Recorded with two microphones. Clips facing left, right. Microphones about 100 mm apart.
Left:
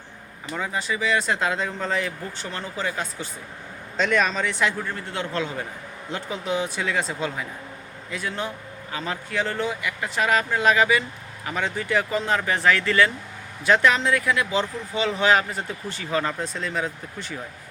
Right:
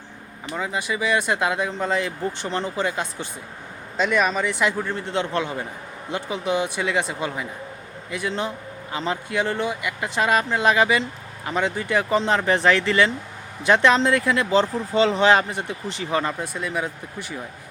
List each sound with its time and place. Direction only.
0.5 s speech: 15° right (ahead or behind)
3.9 s speech: 10° right (ahead or behind)
4.9 s a man's voice: 25° right (ahead or behind)
5.4 s a man's voice: 15° right (ahead or behind)